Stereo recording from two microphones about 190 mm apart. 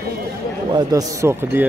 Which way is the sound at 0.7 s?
15° right (ahead or behind).